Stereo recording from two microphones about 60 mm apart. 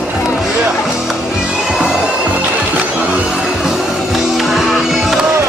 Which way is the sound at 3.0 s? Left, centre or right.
Centre.